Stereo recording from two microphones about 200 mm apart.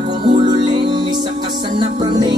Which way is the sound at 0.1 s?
25° right (ahead or behind).